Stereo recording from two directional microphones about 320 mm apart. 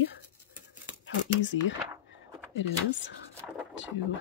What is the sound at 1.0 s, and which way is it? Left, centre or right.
Speech, left.